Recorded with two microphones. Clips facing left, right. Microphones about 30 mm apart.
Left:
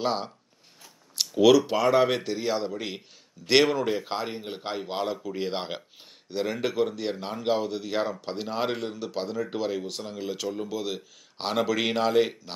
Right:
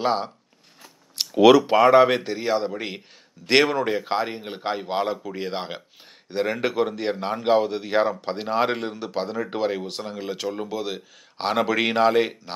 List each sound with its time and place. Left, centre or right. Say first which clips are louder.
0.0 s speech: right 5 dB; centre
1.3 s speech: right 5 dB; right
2.0 s speech: right 6 dB; centre
5.5 s speech: right 1 dB; centre
6.3 s speech: right 4 dB; right